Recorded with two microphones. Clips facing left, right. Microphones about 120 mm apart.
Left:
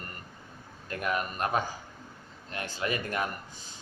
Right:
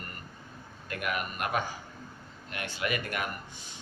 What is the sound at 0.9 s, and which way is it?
A man's voice, 30° left (ahead or behind).